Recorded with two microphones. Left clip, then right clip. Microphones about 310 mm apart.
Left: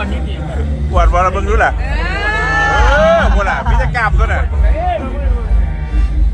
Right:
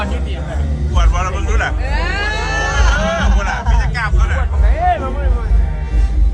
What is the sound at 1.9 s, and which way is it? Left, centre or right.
Vehicle, left.